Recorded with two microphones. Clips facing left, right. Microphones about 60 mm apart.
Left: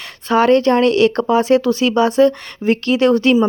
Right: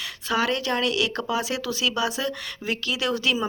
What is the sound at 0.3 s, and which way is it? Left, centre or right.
Speech, left.